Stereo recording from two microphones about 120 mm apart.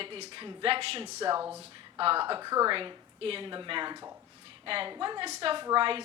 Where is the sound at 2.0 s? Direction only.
45° right (ahead or behind).